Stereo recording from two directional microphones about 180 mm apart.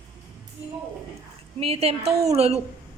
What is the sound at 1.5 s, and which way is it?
A woman's voice, 35° right (ahead or behind).